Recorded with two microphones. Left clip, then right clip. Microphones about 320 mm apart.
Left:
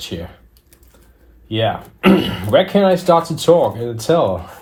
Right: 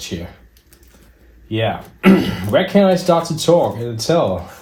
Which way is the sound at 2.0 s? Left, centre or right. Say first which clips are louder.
Left 1 dB; centre.